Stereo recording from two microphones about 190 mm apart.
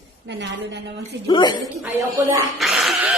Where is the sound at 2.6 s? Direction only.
Centre (ahead or behind).